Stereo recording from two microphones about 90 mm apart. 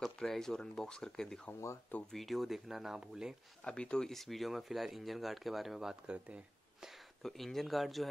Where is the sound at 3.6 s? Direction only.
10° left (ahead or behind); by 6.9 s 15° right (ahead or behind).